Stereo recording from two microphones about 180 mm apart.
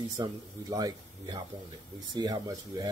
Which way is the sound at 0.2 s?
20° right (ahead or behind).